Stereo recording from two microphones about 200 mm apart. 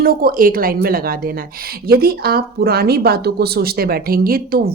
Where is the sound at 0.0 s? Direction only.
45° right (ahead or behind).